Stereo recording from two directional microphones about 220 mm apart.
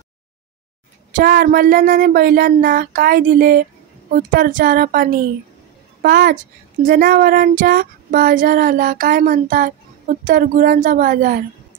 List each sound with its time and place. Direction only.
1.1 s child singing: 40° right (ahead or behind)
6.0 s a woman's voice: 45° right (ahead or behind)
6.8 s child singing: 40° right (ahead or behind)